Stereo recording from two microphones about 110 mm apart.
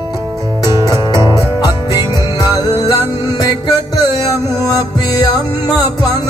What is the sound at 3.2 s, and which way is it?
Music, 40° left (ahead or behind).